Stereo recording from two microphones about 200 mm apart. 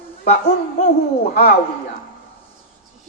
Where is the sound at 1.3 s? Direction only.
45° left (ahead or behind).